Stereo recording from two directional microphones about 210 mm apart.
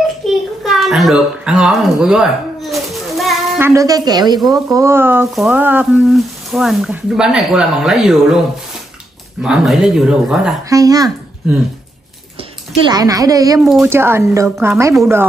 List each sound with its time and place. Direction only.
0.3 s a sound: centre (ahead or behind)
3.6 s a woman's voice: 15° right (ahead or behind)
9.4 s speech: 5° right (ahead or behind)
10.7 s a woman's voice: 15° right (ahead or behind)
12.9 s a woman's voice: 15° right (ahead or behind)